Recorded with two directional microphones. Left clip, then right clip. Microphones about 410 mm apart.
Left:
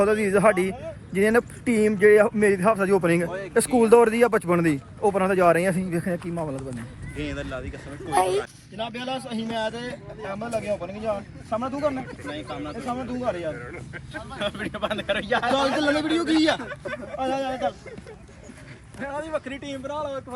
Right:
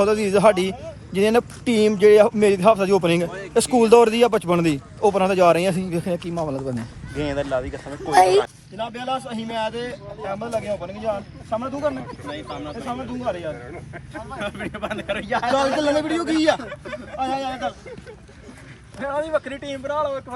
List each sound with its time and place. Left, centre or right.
0.0 s speech: centre
7.2 s speech: centre
8.8 s a man's voice: centre
13.7 s speech: centre
14.3 s a man's voice: centre
18.9 s speech: right